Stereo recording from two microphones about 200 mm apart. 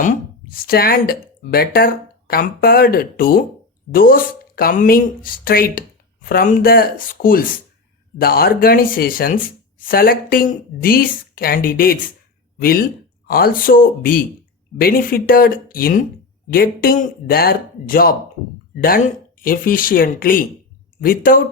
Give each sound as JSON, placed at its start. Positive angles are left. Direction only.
{"t": 0.0, "sound": "speech", "side_deg": 45}